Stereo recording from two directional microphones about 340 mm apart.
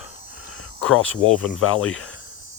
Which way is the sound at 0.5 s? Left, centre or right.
Left.